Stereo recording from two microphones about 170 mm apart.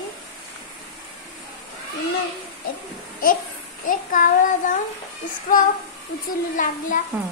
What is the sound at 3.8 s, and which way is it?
Speech, 50° left (ahead or behind).